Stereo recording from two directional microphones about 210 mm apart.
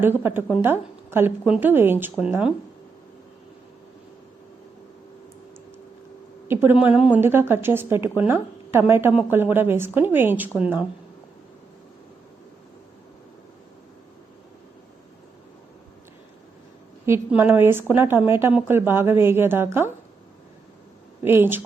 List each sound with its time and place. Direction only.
0.2 s a woman's voice: 10° right (ahead or behind)
6.5 s a woman's voice: 10° right (ahead or behind)
17.1 s a woman's voice: 10° right (ahead or behind)
21.2 s a woman's voice: 10° right (ahead or behind)